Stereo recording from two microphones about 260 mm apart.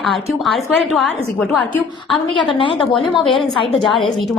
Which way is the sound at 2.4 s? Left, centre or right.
Centre.